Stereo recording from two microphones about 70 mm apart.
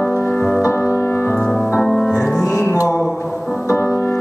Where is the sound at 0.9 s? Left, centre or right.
Left.